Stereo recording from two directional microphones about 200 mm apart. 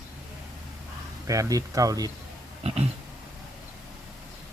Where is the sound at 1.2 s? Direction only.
15° right (ahead or behind).